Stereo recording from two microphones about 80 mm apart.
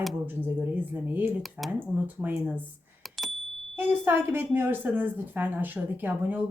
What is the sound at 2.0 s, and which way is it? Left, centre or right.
Speech, right.